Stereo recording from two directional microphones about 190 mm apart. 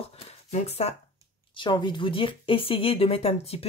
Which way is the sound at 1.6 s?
25° left (ahead or behind).